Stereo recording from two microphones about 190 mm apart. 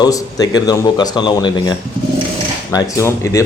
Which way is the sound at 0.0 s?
20° left (ahead or behind).